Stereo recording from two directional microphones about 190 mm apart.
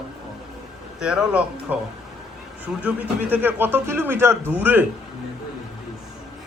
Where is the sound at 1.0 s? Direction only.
5° right (ahead or behind).